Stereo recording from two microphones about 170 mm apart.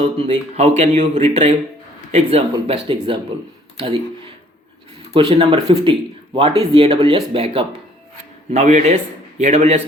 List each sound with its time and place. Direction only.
0.0 s speech: 35° right (ahead or behind)
5.1 s speech: 30° right (ahead or behind)